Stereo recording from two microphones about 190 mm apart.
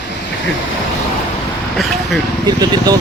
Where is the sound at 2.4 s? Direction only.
20° right (ahead or behind).